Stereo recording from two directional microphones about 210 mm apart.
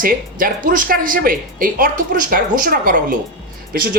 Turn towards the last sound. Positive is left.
turn(degrees=-45)  # may be behind; listen again after turning